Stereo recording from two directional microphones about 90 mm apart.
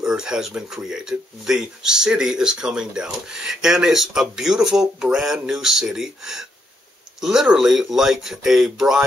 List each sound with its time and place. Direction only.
0.0 s speech: 10° right (ahead or behind)